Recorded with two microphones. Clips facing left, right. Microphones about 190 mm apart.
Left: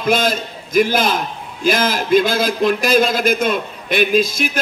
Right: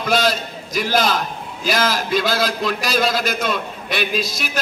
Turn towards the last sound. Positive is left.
turn(degrees=50)  # may be behind; listen again after turning